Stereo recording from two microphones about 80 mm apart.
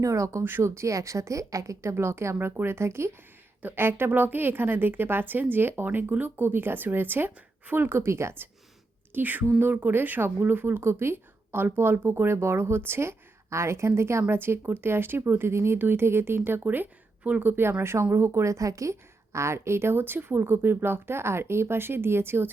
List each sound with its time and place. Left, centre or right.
0.0 s a woman's voice: right
3.6 s a woman's voice: right